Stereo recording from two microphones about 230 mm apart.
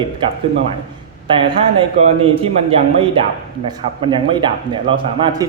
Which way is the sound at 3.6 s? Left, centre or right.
Centre.